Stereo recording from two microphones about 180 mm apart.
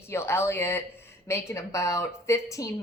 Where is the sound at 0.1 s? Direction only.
15° left (ahead or behind).